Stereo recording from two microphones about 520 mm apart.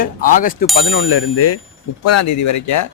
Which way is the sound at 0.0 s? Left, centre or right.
Centre.